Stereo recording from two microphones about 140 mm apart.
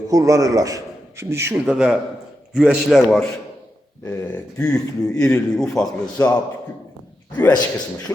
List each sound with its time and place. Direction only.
0.1 s a man's voice: 25° right (ahead or behind)
1.6 s a man's voice: 5° right (ahead or behind)
4.5 s a man's voice: 25° left (ahead or behind)
5.2 s a man's voice: 5° left (ahead or behind)
7.3 s a man's voice: 25° left (ahead or behind)